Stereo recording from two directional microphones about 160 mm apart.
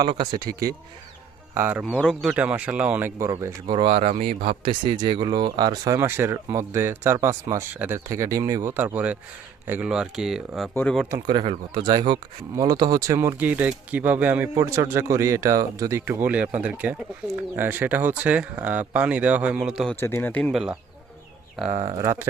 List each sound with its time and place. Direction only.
0.0 s speech: 25° right (ahead or behind)
1.5 s speech: 15° right (ahead or behind)
1.8 s speech: 5° left (ahead or behind)
2.3 s speech: 10° right (ahead or behind); by 4.1 s 35° right (ahead or behind)
4.1 s speech: 50° right (ahead or behind)
4.6 s speech: 30° right (ahead or behind); by 11.0 s 5° left (ahead or behind)
11.3 s speech: 30° right (ahead or behind); by 20.0 s centre (ahead or behind)
20.0 s speech: 15° left (ahead or behind)
20.5 s speech: 5° right (ahead or behind)
21.7 s speech: 45° right (ahead or behind)
21.9 s speech: 20° right (ahead or behind)